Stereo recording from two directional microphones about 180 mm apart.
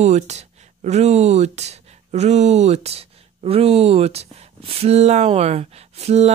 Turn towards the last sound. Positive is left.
turn(degrees=-35)  # may be behind; listen again after turning